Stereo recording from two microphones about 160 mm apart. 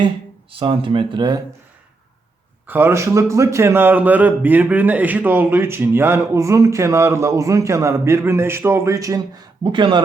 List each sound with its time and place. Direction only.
0.6 s speech: 35° right (ahead or behind)
2.6 s a man's voice: 10° right (ahead or behind); by 10.0 s 30° right (ahead or behind)